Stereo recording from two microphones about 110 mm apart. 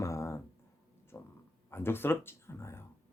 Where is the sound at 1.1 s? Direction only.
20° left (ahead or behind).